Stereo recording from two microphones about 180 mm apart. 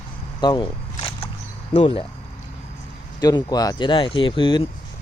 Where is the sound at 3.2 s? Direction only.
20° left (ahead or behind).